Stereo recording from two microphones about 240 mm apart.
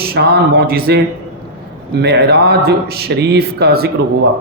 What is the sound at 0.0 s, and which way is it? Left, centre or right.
Speech, right.